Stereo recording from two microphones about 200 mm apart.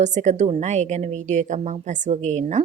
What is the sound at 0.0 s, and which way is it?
A woman's voice, 35° right (ahead or behind).